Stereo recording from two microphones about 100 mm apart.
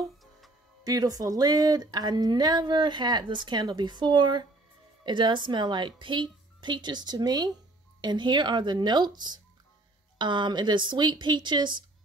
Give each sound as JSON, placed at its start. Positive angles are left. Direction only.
{"t": 0.8, "sound": "speech", "side_deg": -40}